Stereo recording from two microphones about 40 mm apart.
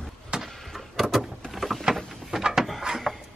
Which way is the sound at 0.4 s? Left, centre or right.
Centre.